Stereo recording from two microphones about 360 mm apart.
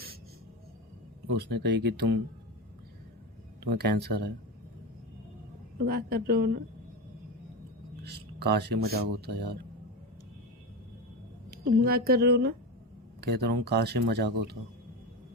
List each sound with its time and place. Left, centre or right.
1.4 s speech: right
3.6 s speech: right
5.8 s speech: right
8.0 s speech: right
11.5 s speech: right